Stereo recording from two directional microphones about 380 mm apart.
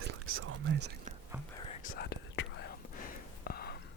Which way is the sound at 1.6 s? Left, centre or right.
Left.